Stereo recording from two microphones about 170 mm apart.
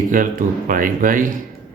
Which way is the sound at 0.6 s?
55° right (ahead or behind).